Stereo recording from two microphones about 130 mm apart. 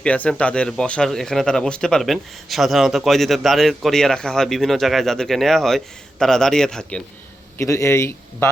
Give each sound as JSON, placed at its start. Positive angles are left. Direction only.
{"t": 0.0, "sound": "speech", "side_deg": 10}
{"t": 7.6, "sound": "a man's voice", "side_deg": 25}